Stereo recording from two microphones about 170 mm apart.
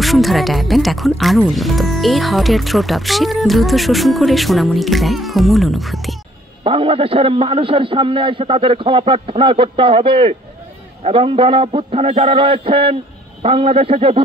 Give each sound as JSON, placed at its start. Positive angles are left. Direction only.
{"t": 0.0, "sound": "speech", "side_deg": 0}
{"t": 6.6, "sound": "a man's voice", "side_deg": -35}